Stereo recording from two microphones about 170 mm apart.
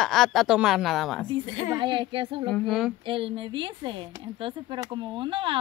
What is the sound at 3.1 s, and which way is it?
Speech, 30° right (ahead or behind).